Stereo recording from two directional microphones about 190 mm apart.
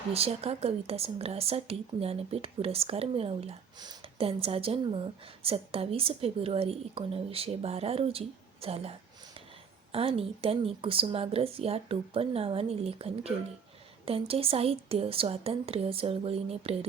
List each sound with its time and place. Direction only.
0.1 s a woman's voice: 30° right (ahead or behind)
8.6 s a sound: 30° right (ahead or behind)
9.9 s a woman's voice: 30° right (ahead or behind)